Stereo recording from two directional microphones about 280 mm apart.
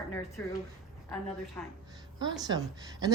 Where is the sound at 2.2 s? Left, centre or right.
Centre.